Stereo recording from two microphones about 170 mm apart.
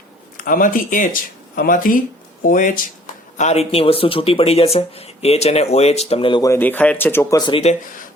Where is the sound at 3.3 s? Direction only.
40° left (ahead or behind).